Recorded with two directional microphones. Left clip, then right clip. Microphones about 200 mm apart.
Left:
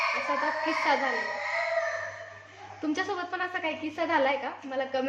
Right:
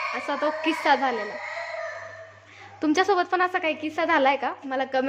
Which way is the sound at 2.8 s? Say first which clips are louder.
Right 9 dB; 60° right (ahead or behind).